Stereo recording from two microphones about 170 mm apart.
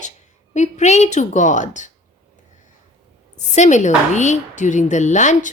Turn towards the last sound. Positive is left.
turn(degrees=45)  # may be behind; listen again after turning